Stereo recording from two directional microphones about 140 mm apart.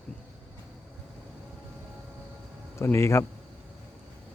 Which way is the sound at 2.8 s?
20° left (ahead or behind).